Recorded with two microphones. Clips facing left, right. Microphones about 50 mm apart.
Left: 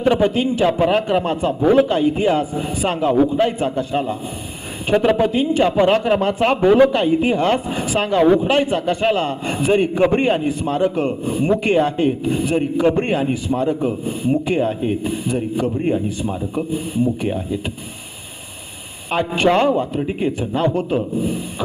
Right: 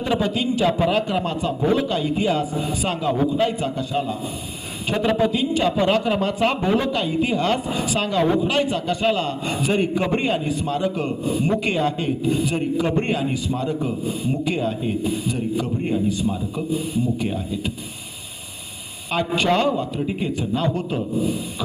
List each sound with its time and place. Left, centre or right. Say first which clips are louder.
0.0 s a man's voice: left 6 dB; left
19.1 s a man's voice: left 4 dB; left